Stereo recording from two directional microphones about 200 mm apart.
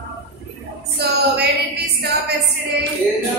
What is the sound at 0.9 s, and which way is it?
Speech, 55° right (ahead or behind).